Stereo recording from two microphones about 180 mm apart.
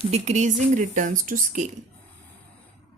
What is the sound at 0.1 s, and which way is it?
Speech, 40° right (ahead or behind).